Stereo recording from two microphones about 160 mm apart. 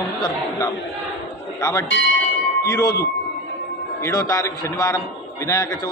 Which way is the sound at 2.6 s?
20° left (ahead or behind).